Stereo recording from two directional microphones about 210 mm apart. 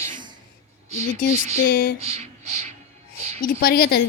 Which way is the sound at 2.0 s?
30° right (ahead or behind).